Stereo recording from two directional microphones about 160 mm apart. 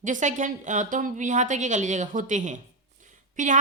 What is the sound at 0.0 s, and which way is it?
Speech, 50° right (ahead or behind).